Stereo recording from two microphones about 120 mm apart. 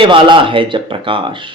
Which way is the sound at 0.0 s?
45° right (ahead or behind).